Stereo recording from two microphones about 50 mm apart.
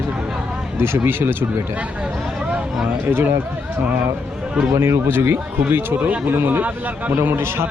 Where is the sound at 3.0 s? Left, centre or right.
Right.